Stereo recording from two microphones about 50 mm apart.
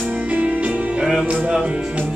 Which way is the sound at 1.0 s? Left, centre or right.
Centre.